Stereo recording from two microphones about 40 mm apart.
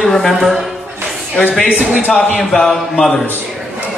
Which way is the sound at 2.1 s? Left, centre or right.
Centre.